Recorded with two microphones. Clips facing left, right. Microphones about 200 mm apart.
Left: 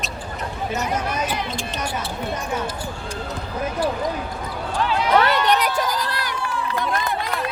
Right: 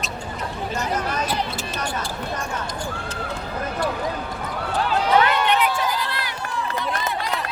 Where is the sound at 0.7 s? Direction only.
10° left (ahead or behind).